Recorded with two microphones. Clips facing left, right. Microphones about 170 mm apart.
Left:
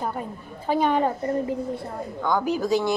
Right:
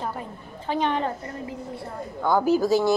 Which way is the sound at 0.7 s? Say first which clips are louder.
Left 3 dB; 10° left (ahead or behind).